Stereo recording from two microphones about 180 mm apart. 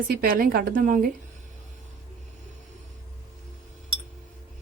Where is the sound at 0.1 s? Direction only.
55° right (ahead or behind).